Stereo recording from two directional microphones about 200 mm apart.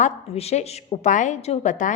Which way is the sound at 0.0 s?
30° left (ahead or behind).